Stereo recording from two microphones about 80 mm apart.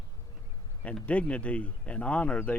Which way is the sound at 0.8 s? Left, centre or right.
Centre.